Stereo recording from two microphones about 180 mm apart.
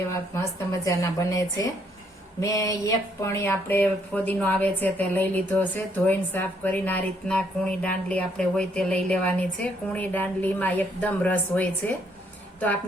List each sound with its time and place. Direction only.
0.1 s a woman's voice: 15° left (ahead or behind)